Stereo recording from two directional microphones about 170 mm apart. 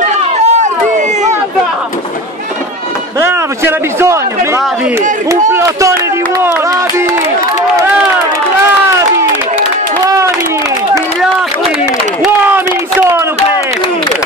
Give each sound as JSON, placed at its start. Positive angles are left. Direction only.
{"t": 0.0, "sound": "run", "side_deg": -45}
{"t": 3.2, "sound": "a man's voice", "side_deg": -15}